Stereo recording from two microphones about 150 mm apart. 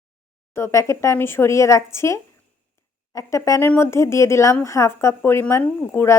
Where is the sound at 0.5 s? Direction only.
20° left (ahead or behind).